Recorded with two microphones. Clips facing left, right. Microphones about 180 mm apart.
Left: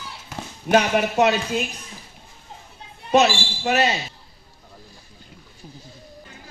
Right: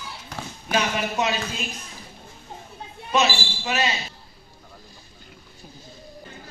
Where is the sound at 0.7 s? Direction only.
60° left (ahead or behind).